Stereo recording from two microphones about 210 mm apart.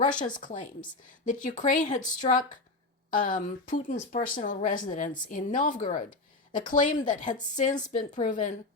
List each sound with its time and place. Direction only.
0.0 s speech: 35° left (ahead or behind)